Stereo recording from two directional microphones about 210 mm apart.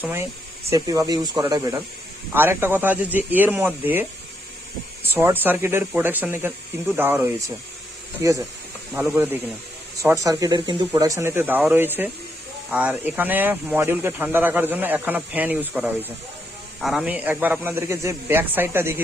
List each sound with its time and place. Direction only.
0.0 s speech: 10° right (ahead or behind)
5.1 s speech: 10° right (ahead or behind)